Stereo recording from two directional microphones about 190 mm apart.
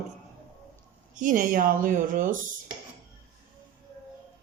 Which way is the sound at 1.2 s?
45° right (ahead or behind).